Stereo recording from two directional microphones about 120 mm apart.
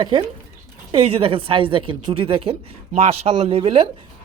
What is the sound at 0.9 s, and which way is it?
A woman's voice, 50° right (ahead or behind).